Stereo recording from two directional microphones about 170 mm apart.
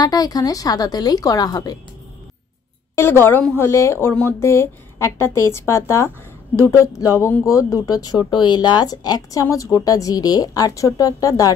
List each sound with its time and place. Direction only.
0.0 s speech: 20° left (ahead or behind)
3.0 s speech: 15° left (ahead or behind)